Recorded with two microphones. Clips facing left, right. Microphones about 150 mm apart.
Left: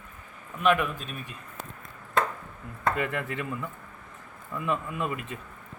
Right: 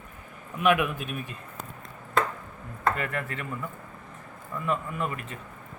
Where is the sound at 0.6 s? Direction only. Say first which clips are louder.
Right 1 dB; 10° right (ahead or behind).